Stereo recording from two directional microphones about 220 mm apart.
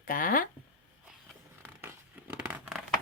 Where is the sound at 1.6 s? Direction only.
10° right (ahead or behind).